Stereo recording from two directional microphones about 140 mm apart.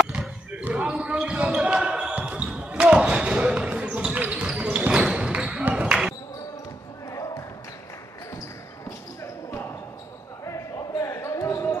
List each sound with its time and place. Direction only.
0.0 s basketball bounce: 5° right (ahead or behind)
7.1 s basketball bounce: 25° left (ahead or behind)
8.8 s basketball bounce: 20° left (ahead or behind)